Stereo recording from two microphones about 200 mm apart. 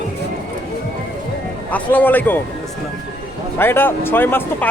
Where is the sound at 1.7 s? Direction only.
10° left (ahead or behind).